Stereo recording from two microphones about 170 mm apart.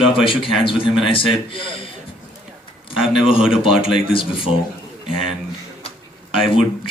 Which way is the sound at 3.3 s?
30° left (ahead or behind).